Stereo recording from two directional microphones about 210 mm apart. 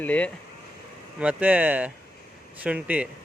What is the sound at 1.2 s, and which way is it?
Speech, 5° right (ahead or behind).